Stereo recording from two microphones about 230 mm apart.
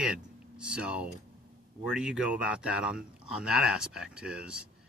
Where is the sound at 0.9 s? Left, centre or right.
Centre.